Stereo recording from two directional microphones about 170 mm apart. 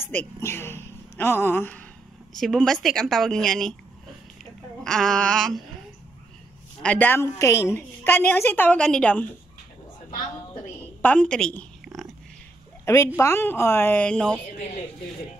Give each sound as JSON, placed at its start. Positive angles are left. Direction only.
{"t": 0.0, "sound": "a woman's voice", "side_deg": 10}
{"t": 4.8, "sound": "a woman's voice", "side_deg": 5}
{"t": 6.8, "sound": "a woman's voice", "side_deg": 10}
{"t": 11.0, "sound": "a sound", "side_deg": 10}
{"t": 12.8, "sound": "a woman's voice", "side_deg": 15}